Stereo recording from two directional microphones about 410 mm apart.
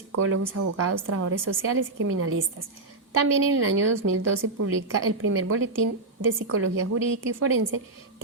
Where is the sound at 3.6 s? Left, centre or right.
Right.